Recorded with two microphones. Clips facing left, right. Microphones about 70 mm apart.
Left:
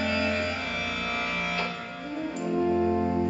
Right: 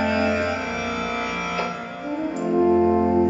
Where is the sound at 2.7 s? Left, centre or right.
Right.